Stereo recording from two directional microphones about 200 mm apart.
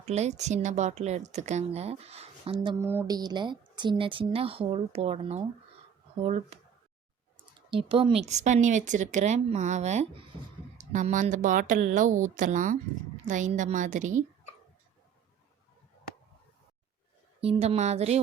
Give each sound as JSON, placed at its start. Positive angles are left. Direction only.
{"t": 0.0, "sound": "a woman's voice", "side_deg": -35}
{"t": 7.7, "sound": "a woman's voice", "side_deg": -25}
{"t": 17.4, "sound": "a woman's voice", "side_deg": -30}